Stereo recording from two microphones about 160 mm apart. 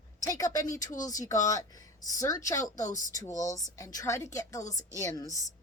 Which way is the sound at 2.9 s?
50° left (ahead or behind).